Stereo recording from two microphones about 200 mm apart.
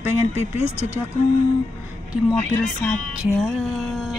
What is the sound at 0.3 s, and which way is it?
Speech, 30° left (ahead or behind).